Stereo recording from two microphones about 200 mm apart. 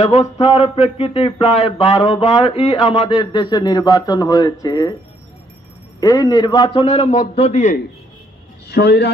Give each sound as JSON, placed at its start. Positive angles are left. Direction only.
{"t": 0.0, "sound": "a man's voice", "side_deg": 35}
{"t": 5.9, "sound": "a man's voice", "side_deg": 20}
{"t": 8.6, "sound": "speech", "side_deg": 55}